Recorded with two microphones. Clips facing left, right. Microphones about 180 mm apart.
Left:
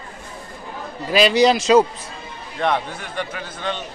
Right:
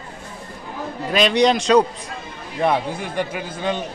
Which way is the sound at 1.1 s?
5° left (ahead or behind).